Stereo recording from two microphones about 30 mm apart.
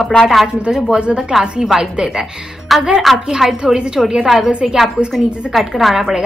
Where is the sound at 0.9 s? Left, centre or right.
Right.